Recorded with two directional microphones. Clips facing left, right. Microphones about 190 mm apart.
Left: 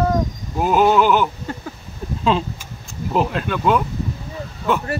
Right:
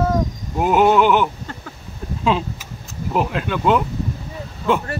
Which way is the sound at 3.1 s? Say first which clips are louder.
Left 1 dB; 10° right (ahead or behind).